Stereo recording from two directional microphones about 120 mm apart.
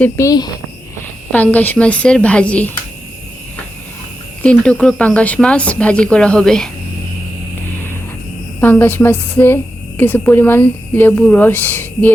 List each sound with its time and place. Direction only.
0.2 s speech: 30° left (ahead or behind)
1.3 s speech: 15° left (ahead or behind)
4.4 s speech: 10° left (ahead or behind)
8.6 s speech: 15° left (ahead or behind)